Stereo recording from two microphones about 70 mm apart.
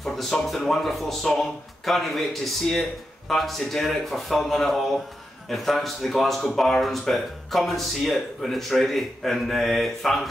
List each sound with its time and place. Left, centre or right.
0.0 s speech: centre